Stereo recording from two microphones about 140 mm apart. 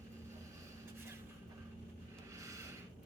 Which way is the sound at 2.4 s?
20° right (ahead or behind).